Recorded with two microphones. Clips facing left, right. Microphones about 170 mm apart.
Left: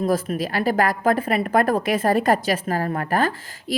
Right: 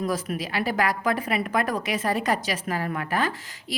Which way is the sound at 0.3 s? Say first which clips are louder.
Left 5 dB; 45° left (ahead or behind).